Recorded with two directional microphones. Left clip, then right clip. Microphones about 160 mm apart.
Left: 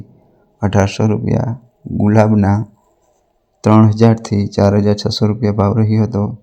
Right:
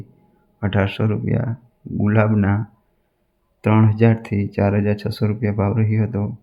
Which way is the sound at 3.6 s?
25° left (ahead or behind).